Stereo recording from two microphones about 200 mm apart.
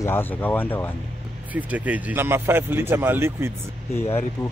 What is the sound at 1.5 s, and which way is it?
Speech, 5° right (ahead or behind).